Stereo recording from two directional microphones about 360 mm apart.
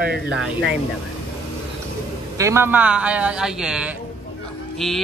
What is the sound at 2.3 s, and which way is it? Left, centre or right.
Speech, centre.